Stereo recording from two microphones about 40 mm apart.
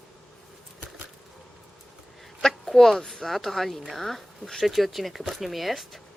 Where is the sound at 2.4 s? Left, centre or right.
Centre.